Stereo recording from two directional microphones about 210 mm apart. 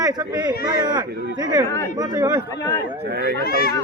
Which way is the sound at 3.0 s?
50° right (ahead or behind).